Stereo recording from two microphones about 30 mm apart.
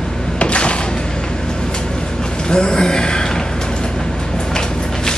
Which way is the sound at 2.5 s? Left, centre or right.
Left.